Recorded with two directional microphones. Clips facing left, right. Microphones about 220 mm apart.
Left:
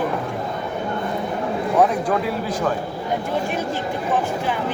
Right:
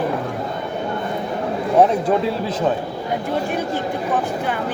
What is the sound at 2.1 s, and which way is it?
Speech, 25° right (ahead or behind).